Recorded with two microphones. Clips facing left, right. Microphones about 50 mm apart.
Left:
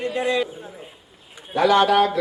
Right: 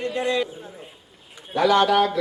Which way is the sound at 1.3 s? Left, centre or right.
Left.